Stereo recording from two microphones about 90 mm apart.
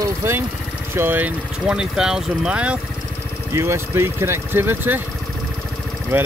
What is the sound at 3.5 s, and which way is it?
Speech, 30° right (ahead or behind).